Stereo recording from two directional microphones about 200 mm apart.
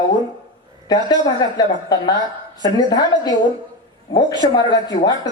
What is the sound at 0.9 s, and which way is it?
Speech, 20° left (ahead or behind).